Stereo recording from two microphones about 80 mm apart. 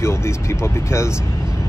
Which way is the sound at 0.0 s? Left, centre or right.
Left.